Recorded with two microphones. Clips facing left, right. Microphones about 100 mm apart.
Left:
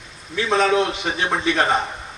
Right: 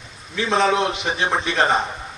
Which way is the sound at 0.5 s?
20° right (ahead or behind).